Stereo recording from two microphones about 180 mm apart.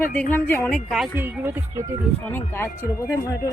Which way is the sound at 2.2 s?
10° left (ahead or behind).